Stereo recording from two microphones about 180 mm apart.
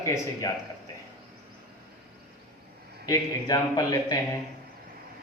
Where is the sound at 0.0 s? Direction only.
15° left (ahead or behind).